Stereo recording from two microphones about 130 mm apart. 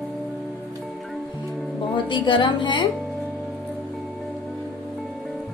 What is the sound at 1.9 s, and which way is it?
Speech, 40° left (ahead or behind).